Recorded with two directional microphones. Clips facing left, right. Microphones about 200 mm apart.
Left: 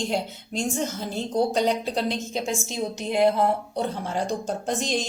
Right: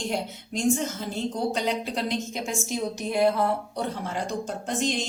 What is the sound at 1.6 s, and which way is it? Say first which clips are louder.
A woman's voice: left 4 dB; 35° left (ahead or behind).